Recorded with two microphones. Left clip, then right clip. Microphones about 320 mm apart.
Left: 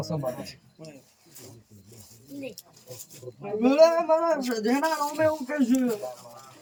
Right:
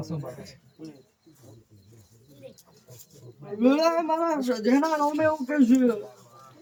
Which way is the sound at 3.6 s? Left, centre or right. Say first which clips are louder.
Left 3 dB; centre.